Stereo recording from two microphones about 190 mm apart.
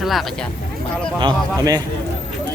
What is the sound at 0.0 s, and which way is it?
Speech, centre (ahead or behind).